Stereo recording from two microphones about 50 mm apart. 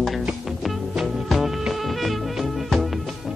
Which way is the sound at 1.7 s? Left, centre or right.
Centre.